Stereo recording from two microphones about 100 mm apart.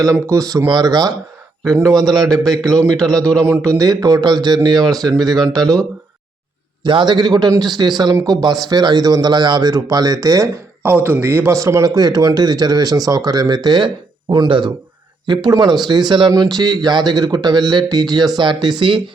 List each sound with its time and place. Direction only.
0.0 s speech: 35° right (ahead or behind)
1.6 s a man's voice: 5° left (ahead or behind)
1.9 s speech: 45° right (ahead or behind)
4.9 s speech: 5° left (ahead or behind)
6.8 s speech: 50° right (ahead or behind); by 10.4 s 35° right (ahead or behind)
11.0 s a man's voice: 20° right (ahead or behind); by 19.0 s 55° right (ahead or behind)